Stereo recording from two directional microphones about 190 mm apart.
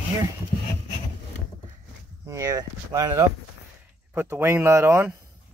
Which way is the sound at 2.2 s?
15° right (ahead or behind).